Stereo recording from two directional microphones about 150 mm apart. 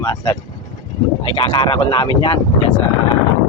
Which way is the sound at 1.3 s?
35° left (ahead or behind).